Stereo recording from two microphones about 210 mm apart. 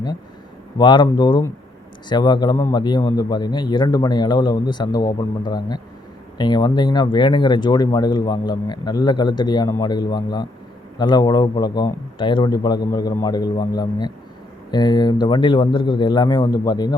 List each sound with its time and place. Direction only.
0.8 s speech: 20° left (ahead or behind)